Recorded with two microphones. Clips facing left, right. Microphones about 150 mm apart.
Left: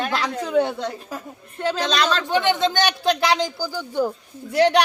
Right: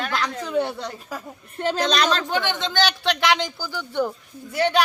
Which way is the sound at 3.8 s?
10° left (ahead or behind).